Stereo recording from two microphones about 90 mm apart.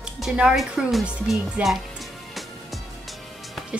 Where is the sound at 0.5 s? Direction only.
Centre (ahead or behind).